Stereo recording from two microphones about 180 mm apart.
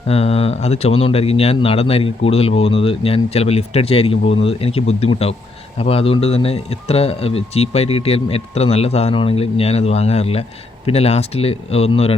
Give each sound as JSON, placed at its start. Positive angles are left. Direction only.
{"t": 0.1, "sound": "speech", "side_deg": 35}